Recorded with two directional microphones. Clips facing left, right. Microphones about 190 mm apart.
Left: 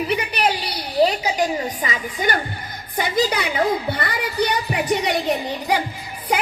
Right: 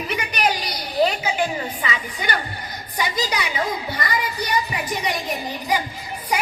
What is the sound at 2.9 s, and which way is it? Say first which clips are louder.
A woman's voice: left 4 dB; 55° left (ahead or behind).